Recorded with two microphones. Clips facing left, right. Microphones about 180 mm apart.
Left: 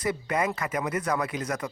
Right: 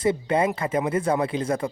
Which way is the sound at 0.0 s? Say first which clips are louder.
Right 6 dB; 25° right (ahead or behind).